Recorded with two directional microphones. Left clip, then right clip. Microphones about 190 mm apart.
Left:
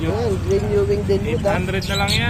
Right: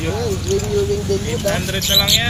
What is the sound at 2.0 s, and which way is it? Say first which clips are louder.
Speech: right 5 dB; 55° left (ahead or behind).